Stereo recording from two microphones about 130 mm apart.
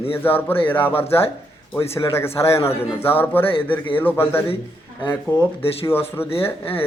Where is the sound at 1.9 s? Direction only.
20° left (ahead or behind).